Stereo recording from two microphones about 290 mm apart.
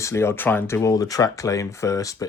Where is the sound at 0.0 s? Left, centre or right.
Centre.